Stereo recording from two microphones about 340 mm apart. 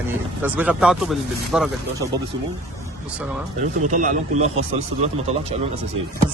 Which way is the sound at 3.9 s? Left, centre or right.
Right.